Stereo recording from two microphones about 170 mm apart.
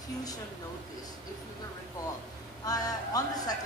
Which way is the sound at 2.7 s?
20° left (ahead or behind).